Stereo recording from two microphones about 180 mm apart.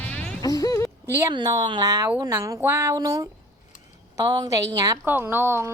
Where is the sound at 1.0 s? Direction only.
20° right (ahead or behind).